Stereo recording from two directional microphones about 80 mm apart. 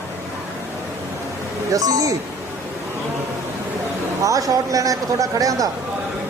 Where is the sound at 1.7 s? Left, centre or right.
Right.